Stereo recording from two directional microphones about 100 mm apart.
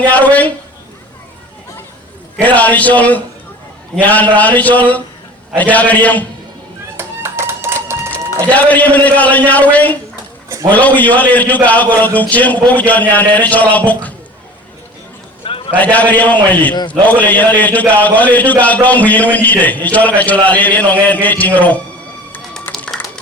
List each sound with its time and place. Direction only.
0.0 s a man's voice: 15° left (ahead or behind)
2.4 s a man's voice: 15° left (ahead or behind)
6.9 s music: 25° right (ahead or behind)
8.5 s a man's voice: 15° left (ahead or behind)
15.4 s a sound: 65° left (ahead or behind)
15.7 s a man's voice: 15° left (ahead or behind)
22.7 s a sound: 5° left (ahead or behind)